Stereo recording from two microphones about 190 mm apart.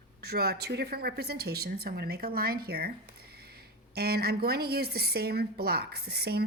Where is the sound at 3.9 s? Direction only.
55° right (ahead or behind).